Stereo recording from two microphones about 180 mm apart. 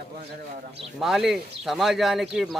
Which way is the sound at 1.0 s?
Centre (ahead or behind).